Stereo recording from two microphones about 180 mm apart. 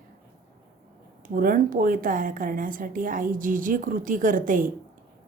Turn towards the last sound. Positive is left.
turn(degrees=-45)  # may be behind; listen again after turning